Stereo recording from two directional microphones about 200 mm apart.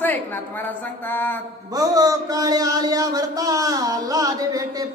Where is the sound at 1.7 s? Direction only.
20° right (ahead or behind).